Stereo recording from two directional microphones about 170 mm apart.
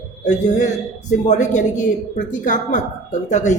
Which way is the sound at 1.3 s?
45° left (ahead or behind).